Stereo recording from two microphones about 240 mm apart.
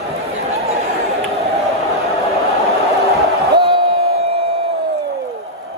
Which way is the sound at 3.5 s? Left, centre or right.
Right.